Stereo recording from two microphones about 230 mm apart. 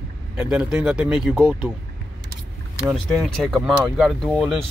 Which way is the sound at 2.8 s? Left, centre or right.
Centre.